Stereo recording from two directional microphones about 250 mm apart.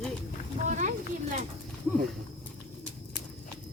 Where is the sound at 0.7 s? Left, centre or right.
Right.